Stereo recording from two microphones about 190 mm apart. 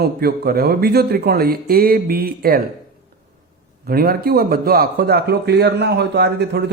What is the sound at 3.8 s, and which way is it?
A man's voice, 50° right (ahead or behind).